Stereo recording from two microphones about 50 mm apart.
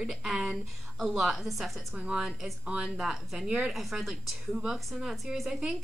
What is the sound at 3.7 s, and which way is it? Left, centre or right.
Speech, centre.